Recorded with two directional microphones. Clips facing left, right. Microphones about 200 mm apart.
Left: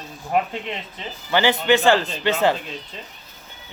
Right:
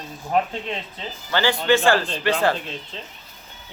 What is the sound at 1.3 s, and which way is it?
Speech, 15° left (ahead or behind).